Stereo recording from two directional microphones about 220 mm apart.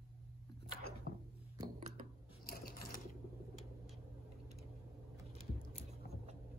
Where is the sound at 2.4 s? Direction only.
40° left (ahead or behind).